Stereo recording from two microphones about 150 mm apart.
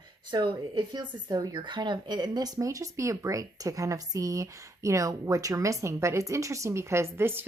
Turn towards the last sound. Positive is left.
turn(degrees=-15)  # may be behind; listen again after turning